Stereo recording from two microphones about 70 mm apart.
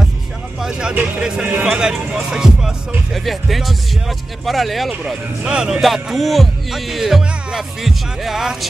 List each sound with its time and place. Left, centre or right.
0.6 s vehicle: centre
1.2 s speech: centre
1.7 s speech: centre
3.1 s music: centre
5.4 s music: centre